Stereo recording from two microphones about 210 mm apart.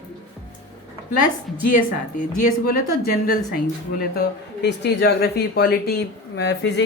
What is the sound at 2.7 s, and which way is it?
Speech, 45° left (ahead or behind).